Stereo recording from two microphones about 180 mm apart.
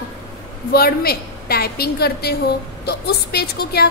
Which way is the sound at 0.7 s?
60° left (ahead or behind).